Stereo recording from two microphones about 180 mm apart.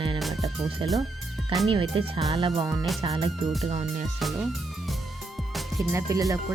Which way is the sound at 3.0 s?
30° right (ahead or behind).